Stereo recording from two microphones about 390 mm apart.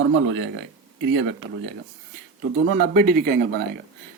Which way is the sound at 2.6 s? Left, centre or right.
Right.